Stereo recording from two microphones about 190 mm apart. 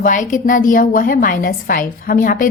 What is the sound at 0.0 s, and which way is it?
A woman's voice, 45° left (ahead or behind).